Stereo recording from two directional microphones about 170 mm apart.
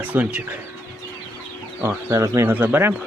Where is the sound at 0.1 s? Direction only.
5° right (ahead or behind).